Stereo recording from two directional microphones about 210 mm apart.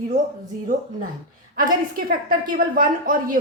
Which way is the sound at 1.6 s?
45° right (ahead or behind).